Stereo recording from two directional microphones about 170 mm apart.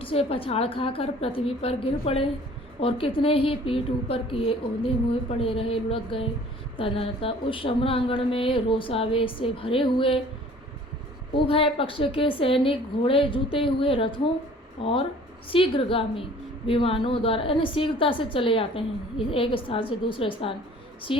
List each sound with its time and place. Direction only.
0.0 s a woman's voice: 35° left (ahead or behind)
11.4 s a woman's voice: 35° left (ahead or behind)